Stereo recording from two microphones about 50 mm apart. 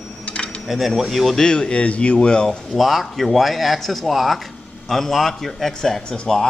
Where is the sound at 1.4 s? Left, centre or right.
Centre.